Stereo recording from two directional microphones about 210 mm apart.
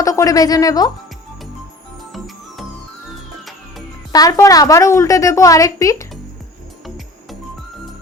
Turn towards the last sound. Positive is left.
turn(degrees=15)  # may be behind; listen again after turning